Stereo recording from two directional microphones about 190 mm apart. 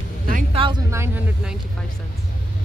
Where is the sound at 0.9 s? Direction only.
10° right (ahead or behind).